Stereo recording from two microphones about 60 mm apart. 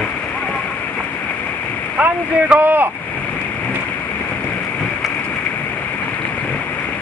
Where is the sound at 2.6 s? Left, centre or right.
Right.